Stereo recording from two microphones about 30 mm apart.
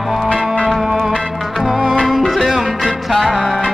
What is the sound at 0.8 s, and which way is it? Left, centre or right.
Music, centre.